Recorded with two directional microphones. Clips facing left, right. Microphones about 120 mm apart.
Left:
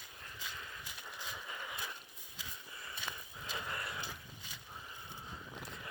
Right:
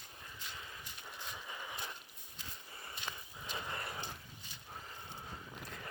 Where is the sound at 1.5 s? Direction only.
25° right (ahead or behind).